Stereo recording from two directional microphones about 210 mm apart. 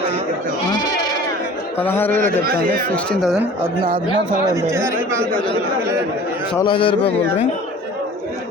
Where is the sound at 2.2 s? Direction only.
45° right (ahead or behind).